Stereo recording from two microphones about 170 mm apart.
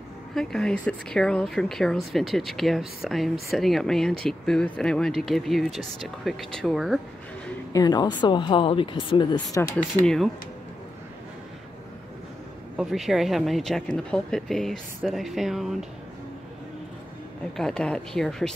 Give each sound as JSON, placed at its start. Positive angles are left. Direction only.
{"t": 0.3, "sound": "speech", "side_deg": 5}
{"t": 7.7, "sound": "speech", "side_deg": 25}
{"t": 9.6, "sound": "speech", "side_deg": 15}
{"t": 10.0, "sound": "speech", "side_deg": 0}
{"t": 12.7, "sound": "speech", "side_deg": 0}
{"t": 17.6, "sound": "speech", "side_deg": 5}